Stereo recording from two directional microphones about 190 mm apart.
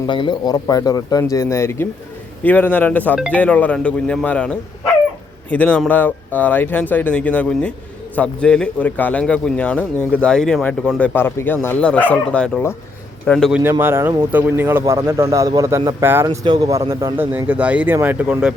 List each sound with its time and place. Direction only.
0.1 s a man's voice: 25° left (ahead or behind); by 13.6 s 5° left (ahead or behind)
13.6 s speech: 10° right (ahead or behind)